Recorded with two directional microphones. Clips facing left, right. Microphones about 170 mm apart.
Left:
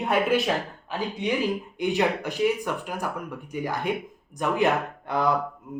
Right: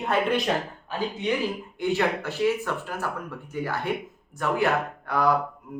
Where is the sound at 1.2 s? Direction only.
15° left (ahead or behind).